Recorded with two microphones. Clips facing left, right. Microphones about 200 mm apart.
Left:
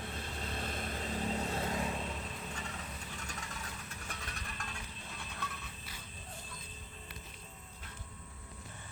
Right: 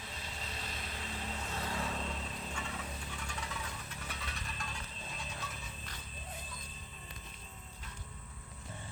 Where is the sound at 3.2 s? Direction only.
40° left (ahead or behind).